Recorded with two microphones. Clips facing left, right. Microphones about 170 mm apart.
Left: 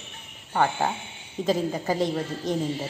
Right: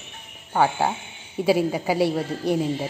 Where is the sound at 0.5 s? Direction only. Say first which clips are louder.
Right 3 dB; 10° right (ahead or behind).